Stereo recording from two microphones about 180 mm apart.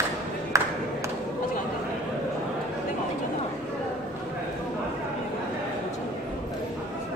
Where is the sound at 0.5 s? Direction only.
15° right (ahead or behind).